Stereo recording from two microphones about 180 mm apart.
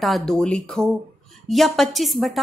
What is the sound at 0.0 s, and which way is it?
A woman's voice, centre (ahead or behind).